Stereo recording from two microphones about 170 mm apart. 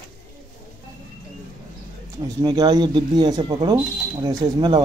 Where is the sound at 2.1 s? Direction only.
25° right (ahead or behind).